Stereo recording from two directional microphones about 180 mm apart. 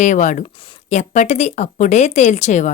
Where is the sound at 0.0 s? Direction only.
45° left (ahead or behind).